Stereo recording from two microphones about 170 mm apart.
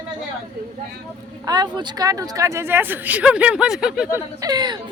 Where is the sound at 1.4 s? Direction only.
25° right (ahead or behind); by 4.2 s 5° right (ahead or behind).